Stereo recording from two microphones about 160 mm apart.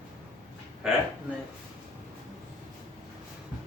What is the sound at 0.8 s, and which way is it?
Speech, 5° right (ahead or behind).